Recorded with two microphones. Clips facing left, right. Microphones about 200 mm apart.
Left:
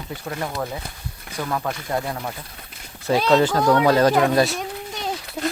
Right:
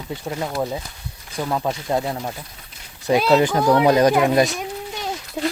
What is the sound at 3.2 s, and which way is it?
Speech, 10° right (ahead or behind).